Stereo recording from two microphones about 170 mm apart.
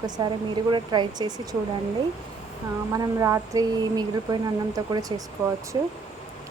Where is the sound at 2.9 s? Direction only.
20° right (ahead or behind).